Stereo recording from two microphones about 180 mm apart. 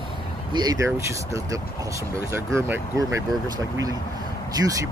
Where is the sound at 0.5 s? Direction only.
20° right (ahead or behind).